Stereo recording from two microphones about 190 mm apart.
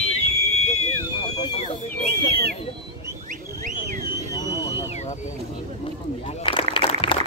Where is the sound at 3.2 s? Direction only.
45° right (ahead or behind).